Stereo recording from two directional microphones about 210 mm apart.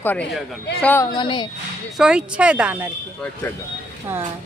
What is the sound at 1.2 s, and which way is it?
Speech, 20° left (ahead or behind).